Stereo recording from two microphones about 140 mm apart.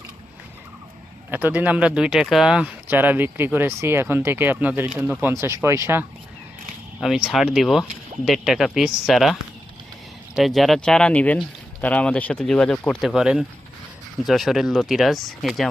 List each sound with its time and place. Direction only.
1.3 s speech: 10° right (ahead or behind)
7.0 s speech: 5° right (ahead or behind)